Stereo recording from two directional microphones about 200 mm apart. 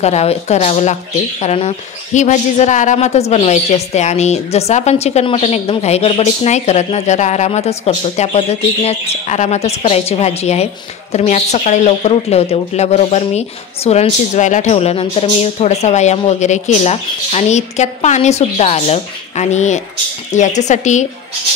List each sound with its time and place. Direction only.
0.0 s a woman's voice: 30° left (ahead or behind)